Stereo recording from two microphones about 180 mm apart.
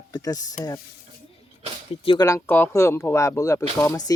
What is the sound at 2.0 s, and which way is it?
Speech, 20° left (ahead or behind).